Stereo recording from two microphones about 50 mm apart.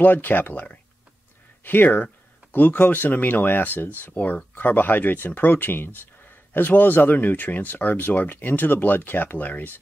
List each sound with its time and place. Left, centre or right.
0.0 s speech: left